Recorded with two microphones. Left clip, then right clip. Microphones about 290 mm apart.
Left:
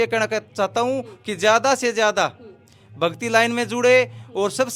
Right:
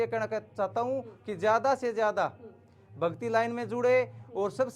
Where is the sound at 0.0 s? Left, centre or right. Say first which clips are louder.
Left 10 dB; left.